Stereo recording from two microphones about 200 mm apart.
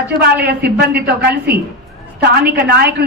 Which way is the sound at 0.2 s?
55° right (ahead or behind).